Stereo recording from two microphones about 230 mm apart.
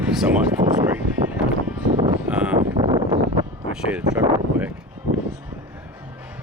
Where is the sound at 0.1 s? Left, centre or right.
Centre.